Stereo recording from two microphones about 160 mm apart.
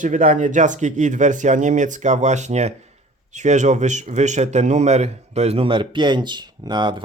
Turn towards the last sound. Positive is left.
turn(degrees=-30)  # may be behind; listen again after turning